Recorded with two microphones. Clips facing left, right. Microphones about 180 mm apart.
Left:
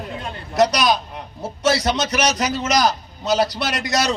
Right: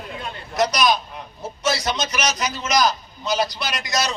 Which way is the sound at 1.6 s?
70° left (ahead or behind).